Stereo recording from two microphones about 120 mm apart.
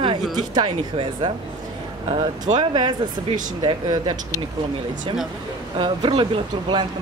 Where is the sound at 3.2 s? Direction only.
90° right.